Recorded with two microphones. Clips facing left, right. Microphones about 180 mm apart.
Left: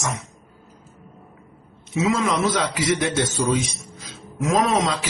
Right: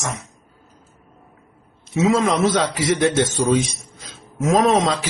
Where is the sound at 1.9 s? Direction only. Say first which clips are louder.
Right 4 dB; 35° right (ahead or behind).